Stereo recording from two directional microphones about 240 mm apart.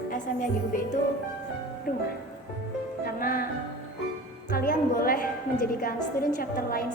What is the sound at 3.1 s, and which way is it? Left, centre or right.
Music, left.